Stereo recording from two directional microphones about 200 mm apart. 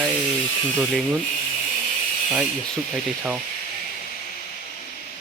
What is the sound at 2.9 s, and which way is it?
Speech, 5° right (ahead or behind).